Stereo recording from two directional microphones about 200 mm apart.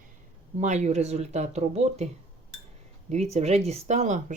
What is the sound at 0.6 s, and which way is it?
Speech, 35° right (ahead or behind).